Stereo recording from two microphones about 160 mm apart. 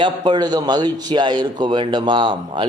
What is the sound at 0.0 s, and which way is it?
A man's voice, 30° right (ahead or behind).